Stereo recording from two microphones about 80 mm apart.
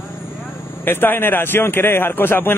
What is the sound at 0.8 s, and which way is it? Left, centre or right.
Speech, left.